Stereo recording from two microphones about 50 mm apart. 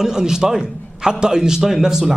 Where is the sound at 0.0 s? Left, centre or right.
Centre.